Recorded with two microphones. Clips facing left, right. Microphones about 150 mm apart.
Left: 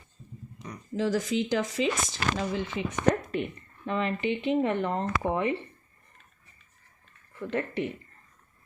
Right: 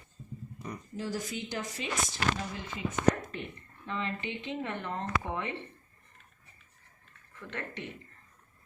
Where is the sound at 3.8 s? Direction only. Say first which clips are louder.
Left 8 dB; 65° left (ahead or behind).